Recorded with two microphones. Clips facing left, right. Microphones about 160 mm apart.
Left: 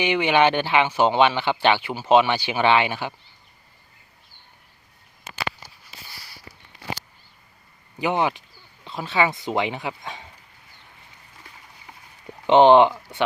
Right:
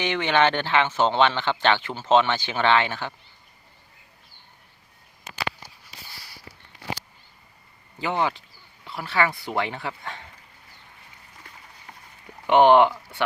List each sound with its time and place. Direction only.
0.0 s speech: 10° left (ahead or behind)
7.9 s speech: 15° left (ahead or behind)
12.5 s speech: 20° left (ahead or behind)